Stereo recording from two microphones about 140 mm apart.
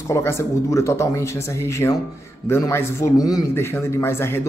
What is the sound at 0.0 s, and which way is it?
A man's voice, 20° left (ahead or behind).